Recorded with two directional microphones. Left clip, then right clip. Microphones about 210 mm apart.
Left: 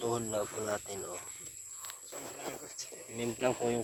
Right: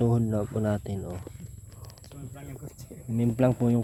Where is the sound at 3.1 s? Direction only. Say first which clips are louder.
Right 7 dB; 40° right (ahead or behind).